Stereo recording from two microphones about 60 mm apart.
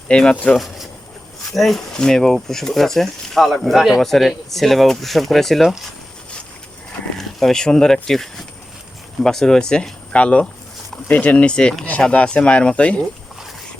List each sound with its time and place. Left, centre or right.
0.1 s speech: centre
1.5 s speech: centre
7.2 s speech: centre; by 13.0 s left